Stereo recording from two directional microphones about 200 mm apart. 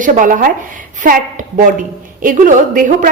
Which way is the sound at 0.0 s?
40° right (ahead or behind).